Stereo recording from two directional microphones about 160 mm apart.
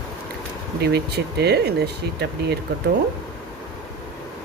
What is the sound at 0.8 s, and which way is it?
Speech, 90° right.